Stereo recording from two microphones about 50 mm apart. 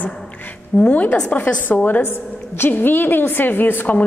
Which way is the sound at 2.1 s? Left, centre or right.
Left.